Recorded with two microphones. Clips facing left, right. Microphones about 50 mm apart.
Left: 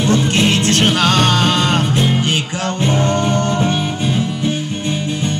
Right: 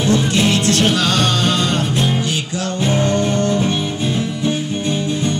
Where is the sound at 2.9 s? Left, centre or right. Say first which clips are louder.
Even; left.